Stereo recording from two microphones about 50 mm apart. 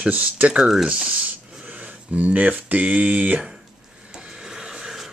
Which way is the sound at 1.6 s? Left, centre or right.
Right.